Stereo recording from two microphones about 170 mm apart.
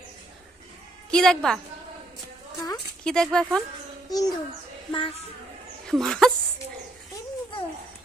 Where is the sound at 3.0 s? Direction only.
5° left (ahead or behind).